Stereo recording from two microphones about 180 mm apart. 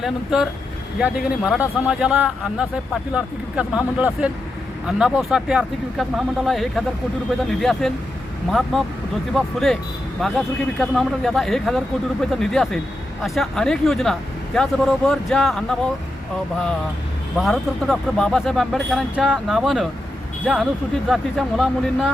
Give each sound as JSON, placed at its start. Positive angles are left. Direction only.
{"t": 0.0, "sound": "speech", "side_deg": -5}
{"t": 9.3, "sound": "speech", "side_deg": 0}
{"t": 17.3, "sound": "speech", "side_deg": 0}